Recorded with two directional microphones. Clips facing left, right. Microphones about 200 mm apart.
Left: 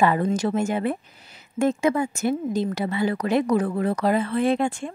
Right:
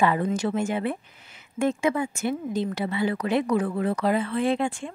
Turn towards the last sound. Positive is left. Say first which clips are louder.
# left 3 dB
turn(degrees=45)  # may be behind; listen again after turning